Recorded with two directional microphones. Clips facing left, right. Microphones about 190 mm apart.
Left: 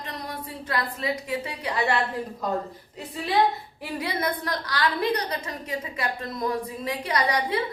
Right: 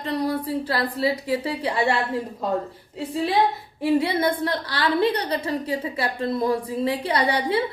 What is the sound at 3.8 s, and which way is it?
A woman's voice, 25° right (ahead or behind).